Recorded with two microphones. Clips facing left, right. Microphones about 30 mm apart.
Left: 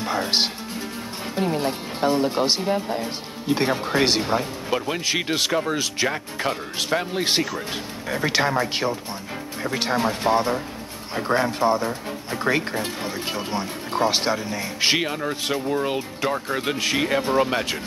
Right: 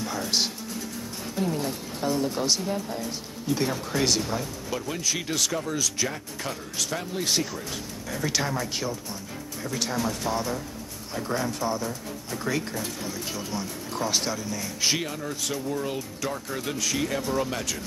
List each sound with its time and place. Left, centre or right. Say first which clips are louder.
0.0 s music: left 5 dB; left
1.3 s speech: left 5 dB; left